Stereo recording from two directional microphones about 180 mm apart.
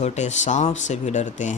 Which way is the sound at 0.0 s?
40° left (ahead or behind).